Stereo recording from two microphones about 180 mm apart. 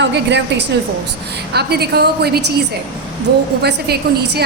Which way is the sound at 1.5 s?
65° right (ahead or behind).